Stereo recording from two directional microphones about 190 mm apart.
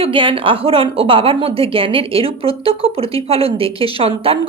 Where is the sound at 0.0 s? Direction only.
30° right (ahead or behind).